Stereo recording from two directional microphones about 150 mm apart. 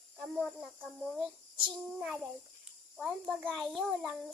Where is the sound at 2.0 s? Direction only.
Centre (ahead or behind).